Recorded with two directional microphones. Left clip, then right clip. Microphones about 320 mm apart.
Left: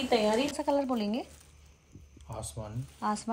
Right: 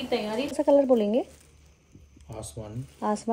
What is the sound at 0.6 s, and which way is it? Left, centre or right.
Speech, left.